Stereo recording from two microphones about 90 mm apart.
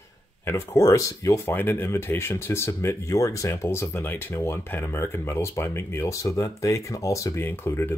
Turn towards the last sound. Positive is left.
turn(degrees=25)  # may be behind; listen again after turning